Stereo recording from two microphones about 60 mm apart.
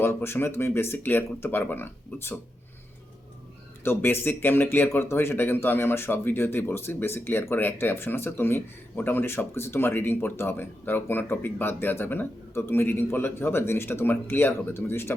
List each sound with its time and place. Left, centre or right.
0.0 s a man's voice: left
3.8 s a man's voice: left
4.9 s a man's voice: left